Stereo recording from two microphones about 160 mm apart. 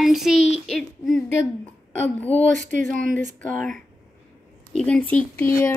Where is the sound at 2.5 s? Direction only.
50° right (ahead or behind).